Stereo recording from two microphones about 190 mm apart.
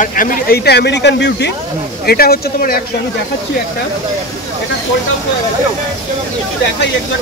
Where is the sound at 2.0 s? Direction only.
55° left (ahead or behind).